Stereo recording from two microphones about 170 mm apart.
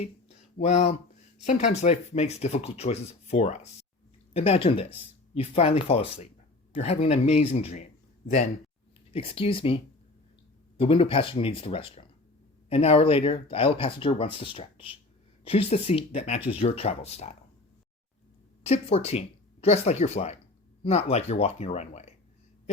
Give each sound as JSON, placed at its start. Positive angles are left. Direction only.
{"t": 0.5, "sound": "speech", "side_deg": 40}
{"t": 9.1, "sound": "speech", "side_deg": 35}
{"t": 18.6, "sound": "speech", "side_deg": 35}